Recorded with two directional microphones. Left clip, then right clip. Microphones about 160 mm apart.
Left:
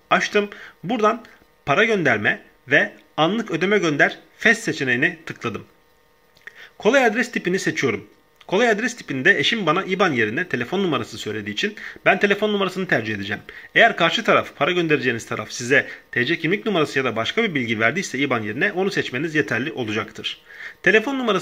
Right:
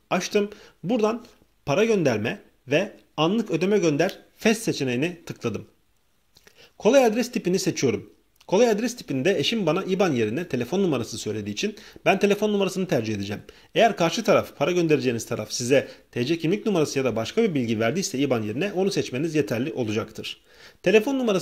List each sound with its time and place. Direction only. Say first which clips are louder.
0.1 s speech: left 5 dB; 40° right (ahead or behind)
6.9 s speech: left 2 dB; 40° right (ahead or behind)